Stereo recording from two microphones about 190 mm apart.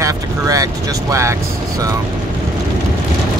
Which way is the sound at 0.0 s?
15° right (ahead or behind).